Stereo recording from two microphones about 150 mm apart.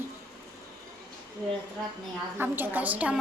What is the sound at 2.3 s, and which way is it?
Speech, 15° right (ahead or behind).